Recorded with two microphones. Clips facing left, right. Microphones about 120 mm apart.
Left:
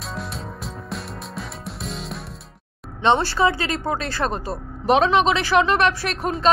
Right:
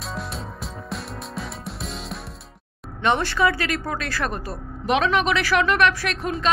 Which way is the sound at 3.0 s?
30° left (ahead or behind).